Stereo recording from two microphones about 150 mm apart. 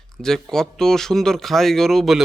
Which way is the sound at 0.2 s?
5° left (ahead or behind).